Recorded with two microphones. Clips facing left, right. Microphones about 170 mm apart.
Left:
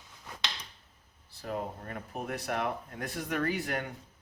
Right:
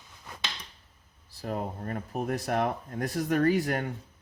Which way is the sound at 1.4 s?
40° right (ahead or behind).